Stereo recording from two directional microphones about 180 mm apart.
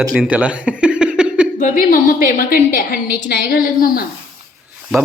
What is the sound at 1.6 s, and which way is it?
A woman's voice, 50° left (ahead or behind).